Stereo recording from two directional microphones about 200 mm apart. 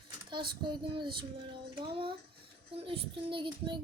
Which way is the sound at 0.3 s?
25° right (ahead or behind).